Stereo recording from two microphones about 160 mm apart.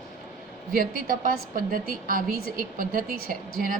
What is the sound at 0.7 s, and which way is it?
A woman's voice, 60° right (ahead or behind).